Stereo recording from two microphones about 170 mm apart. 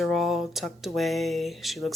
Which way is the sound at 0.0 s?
Centre (ahead or behind).